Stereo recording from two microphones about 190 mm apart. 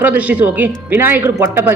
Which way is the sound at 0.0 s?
10° right (ahead or behind).